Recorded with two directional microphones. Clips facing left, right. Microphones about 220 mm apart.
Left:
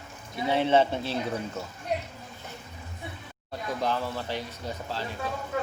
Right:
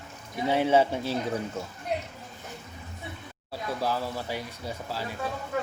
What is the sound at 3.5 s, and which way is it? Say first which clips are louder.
Speech: even; 5° right (ahead or behind).